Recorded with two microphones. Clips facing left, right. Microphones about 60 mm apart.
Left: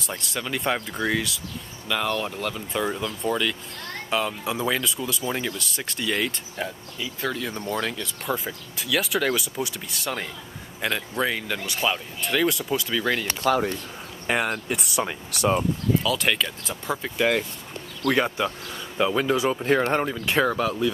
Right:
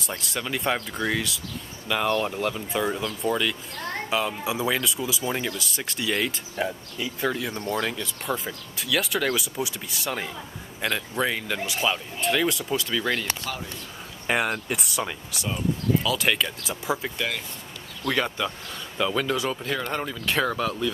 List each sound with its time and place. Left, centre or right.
0.0 s speech: centre
1.9 s speech: centre
13.5 s speech: left
14.2 s speech: centre
15.3 s speech: left
16.0 s speech: centre
18.1 s speech: centre